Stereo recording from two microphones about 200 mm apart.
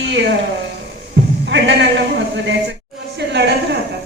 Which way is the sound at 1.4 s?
60° right (ahead or behind).